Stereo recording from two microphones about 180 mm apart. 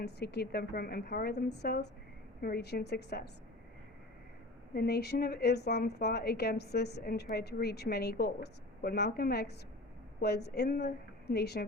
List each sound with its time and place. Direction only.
0.0 s a woman's voice: 65° left (ahead or behind)
4.7 s a woman's voice: 60° left (ahead or behind)